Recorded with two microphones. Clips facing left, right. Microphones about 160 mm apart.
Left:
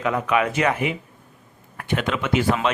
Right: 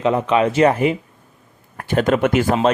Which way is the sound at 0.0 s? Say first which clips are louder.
Right 5 dB; 25° right (ahead or behind).